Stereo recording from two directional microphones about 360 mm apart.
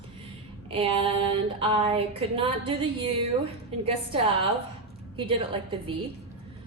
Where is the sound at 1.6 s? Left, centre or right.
Centre.